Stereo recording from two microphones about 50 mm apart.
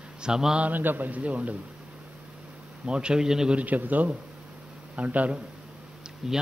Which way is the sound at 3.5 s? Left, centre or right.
Right.